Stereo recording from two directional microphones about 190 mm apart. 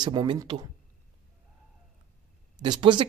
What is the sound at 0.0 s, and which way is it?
Speech, 20° right (ahead or behind).